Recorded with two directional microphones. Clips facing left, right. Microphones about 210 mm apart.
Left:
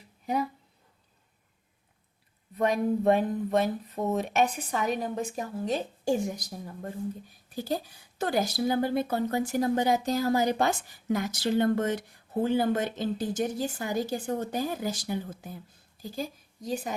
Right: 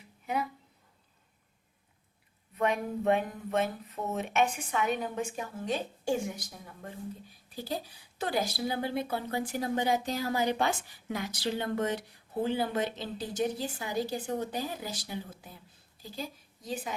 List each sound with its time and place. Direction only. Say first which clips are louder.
2.6 s a woman's voice: left 5 dB; 35° left (ahead or behind)